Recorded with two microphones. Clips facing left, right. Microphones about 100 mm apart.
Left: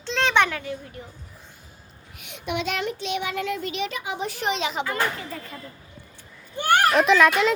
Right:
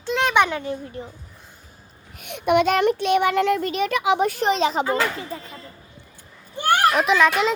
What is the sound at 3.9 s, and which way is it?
Speech, 80° right.